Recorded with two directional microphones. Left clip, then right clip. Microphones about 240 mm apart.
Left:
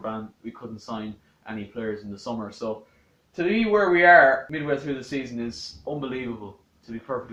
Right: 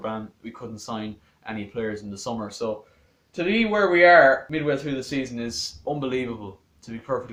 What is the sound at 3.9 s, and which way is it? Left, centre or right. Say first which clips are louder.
Speech: right 1 dB; right.